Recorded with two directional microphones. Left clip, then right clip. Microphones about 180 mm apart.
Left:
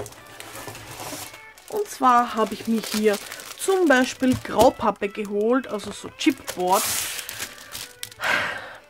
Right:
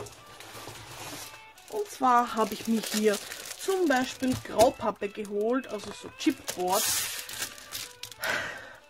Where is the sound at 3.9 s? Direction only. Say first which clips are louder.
Left 8 dB; 25° left (ahead or behind).